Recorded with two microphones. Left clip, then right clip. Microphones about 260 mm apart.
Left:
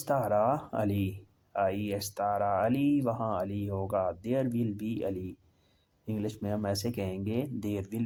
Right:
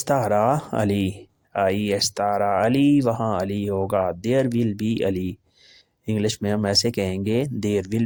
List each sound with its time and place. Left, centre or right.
0.0 s speech: right